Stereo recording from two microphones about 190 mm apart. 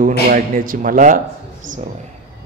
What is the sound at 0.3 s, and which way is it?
Speech, 45° right (ahead or behind).